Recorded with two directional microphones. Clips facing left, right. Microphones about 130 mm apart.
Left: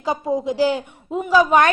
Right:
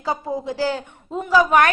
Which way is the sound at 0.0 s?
15° left (ahead or behind).